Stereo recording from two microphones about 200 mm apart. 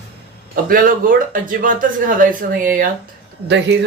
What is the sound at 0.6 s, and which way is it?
Speech, 45° right (ahead or behind).